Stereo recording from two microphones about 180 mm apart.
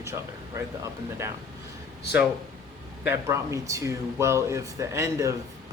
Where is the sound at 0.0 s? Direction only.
15° right (ahead or behind).